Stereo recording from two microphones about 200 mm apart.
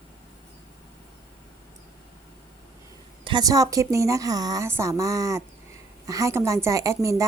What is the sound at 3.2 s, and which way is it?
A woman's voice, 20° right (ahead or behind).